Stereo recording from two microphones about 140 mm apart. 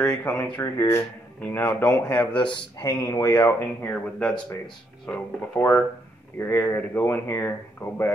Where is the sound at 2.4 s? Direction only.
35° left (ahead or behind).